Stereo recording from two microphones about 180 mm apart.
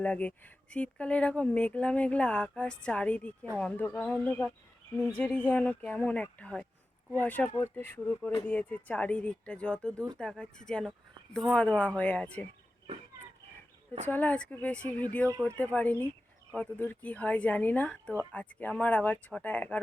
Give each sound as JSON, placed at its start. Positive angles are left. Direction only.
{"t": 0.0, "sound": "speech", "side_deg": 10}
{"t": 14.1, "sound": "speech", "side_deg": 10}